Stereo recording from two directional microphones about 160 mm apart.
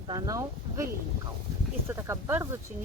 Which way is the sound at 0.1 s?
25° right (ahead or behind).